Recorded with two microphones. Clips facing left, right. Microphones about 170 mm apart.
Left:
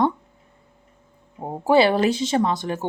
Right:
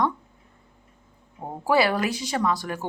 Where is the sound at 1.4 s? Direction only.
25° left (ahead or behind).